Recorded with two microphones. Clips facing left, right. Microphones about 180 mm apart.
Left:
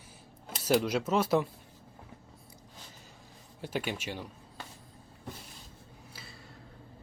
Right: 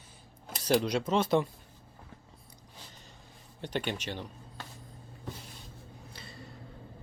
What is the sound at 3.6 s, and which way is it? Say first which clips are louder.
Speech: right 1 dB; 5° left (ahead or behind).